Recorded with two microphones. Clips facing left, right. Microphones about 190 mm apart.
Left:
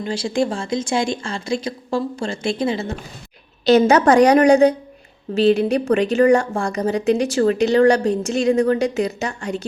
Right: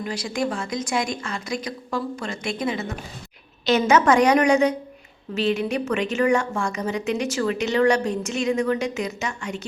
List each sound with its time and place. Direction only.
0.0 s speech: 30° left (ahead or behind)